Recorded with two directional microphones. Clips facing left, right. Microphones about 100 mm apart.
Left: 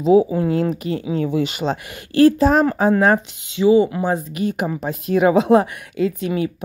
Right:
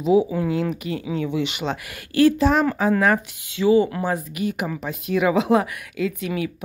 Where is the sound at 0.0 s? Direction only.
35° left (ahead or behind).